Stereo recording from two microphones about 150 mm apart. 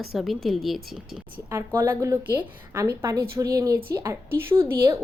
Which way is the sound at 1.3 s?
15° right (ahead or behind).